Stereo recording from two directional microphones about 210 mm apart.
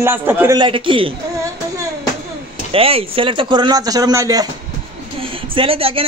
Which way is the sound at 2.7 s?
25° right (ahead or behind).